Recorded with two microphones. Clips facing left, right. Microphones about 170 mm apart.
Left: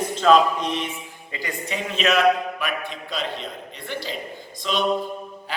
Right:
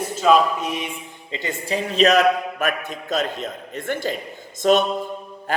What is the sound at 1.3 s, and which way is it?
A man's voice, 25° right (ahead or behind).